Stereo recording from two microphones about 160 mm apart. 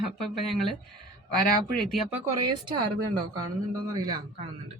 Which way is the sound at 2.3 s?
25° right (ahead or behind).